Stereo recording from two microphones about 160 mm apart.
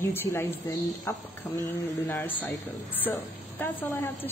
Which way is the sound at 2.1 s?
10° left (ahead or behind).